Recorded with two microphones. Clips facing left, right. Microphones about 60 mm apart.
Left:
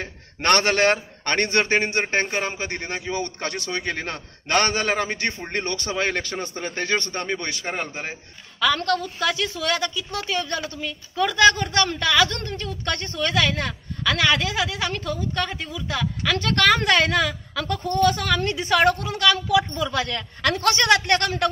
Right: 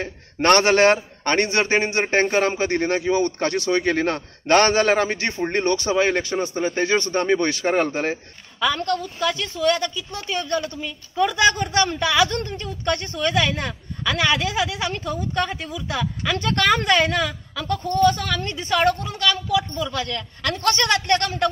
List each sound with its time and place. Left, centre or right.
0.4 s a man's voice: right
2.1 s a man's voice: right
8.5 s a woman's voice: centre